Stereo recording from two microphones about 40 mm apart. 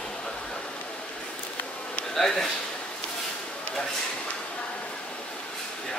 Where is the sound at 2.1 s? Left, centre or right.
Centre.